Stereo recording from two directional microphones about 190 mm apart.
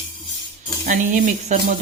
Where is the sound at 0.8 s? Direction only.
40° right (ahead or behind).